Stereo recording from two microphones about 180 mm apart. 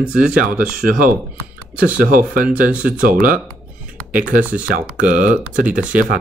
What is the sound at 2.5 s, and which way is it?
Speech, 5° right (ahead or behind).